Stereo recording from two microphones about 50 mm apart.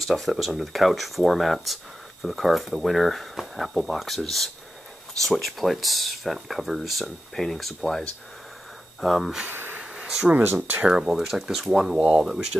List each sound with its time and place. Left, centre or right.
0.0 s speech: centre
9.0 s speech: centre
9.5 s a sound: right
9.8 s a sound: centre
10.4 s speech: right
10.9 s speech: centre